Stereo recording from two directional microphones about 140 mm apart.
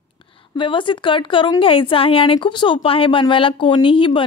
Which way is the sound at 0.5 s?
35° left (ahead or behind).